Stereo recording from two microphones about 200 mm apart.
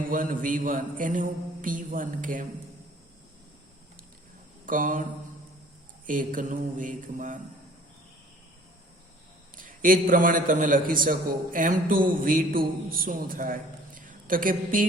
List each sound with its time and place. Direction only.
0.1 s a man's voice: 45° right (ahead or behind)
4.6 s a sound: 40° right (ahead or behind)
6.1 s mantra: 40° right (ahead or behind)
9.6 s a man's voice: 45° right (ahead or behind)